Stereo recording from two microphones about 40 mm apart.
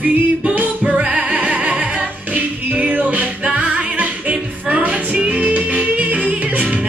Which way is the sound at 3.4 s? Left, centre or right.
Right.